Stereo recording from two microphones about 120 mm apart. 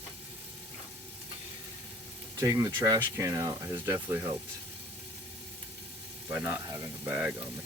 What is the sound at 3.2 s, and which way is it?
Speech, 25° right (ahead or behind).